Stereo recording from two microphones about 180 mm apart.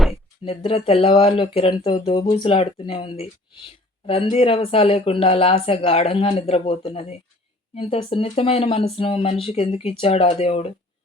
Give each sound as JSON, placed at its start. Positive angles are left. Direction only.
{"t": 0.4, "sound": "speech", "side_deg": 30}